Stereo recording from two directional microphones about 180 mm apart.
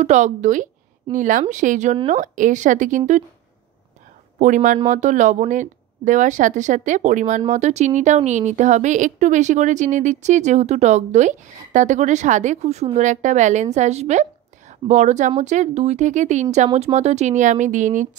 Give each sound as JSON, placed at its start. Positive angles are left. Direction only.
{"t": 0.0, "sound": "a woman's voice", "side_deg": -40}
{"t": 4.4, "sound": "a woman's voice", "side_deg": -45}